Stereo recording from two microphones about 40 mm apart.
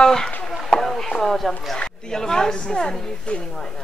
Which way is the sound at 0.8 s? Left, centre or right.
Centre.